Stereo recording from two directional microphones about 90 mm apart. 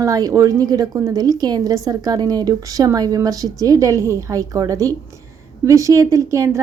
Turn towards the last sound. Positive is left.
turn(degrees=-35)  # may be behind; listen again after turning